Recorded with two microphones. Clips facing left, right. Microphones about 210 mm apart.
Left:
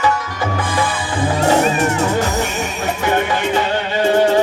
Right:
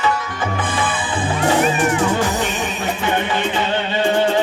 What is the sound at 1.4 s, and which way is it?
Music, 40° left (ahead or behind).